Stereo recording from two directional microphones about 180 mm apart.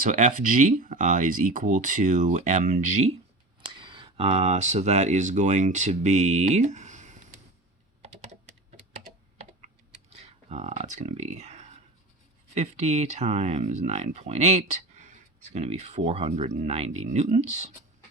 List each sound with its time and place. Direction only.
0.0 s speech: 45° right (ahead or behind)
3.7 s speech: 25° right (ahead or behind); by 7.3 s 40° right (ahead or behind)
10.1 s a sound: 35° right (ahead or behind)
12.5 s speech: 40° right (ahead or behind)